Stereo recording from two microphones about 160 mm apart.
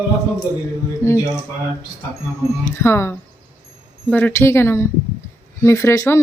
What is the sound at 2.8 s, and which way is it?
Speech, 15° left (ahead or behind).